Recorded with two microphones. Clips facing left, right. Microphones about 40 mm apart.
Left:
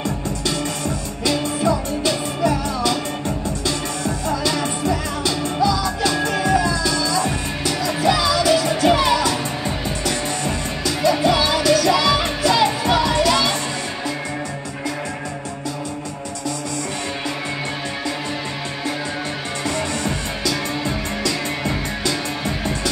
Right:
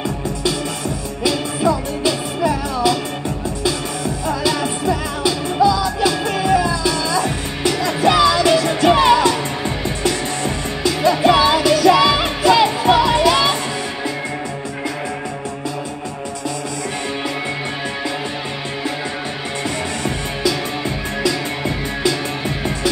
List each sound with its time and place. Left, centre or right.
1.2 s music: centre
4.3 s music: centre
7.6 s music: right
10.8 s music: right
21.2 s music: right